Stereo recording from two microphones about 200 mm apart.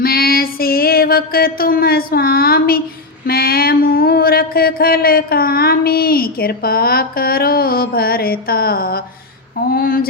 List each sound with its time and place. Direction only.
0.0 s music: 50° left (ahead or behind)
3.2 s mantra: 50° left (ahead or behind)